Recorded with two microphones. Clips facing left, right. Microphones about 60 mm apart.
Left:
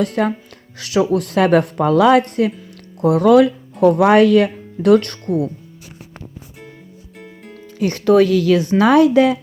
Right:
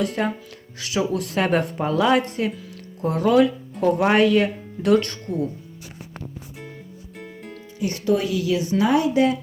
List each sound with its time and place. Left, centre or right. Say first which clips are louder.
0.0 s speech: left 5 dB; left
7.8 s speech: left 9 dB; left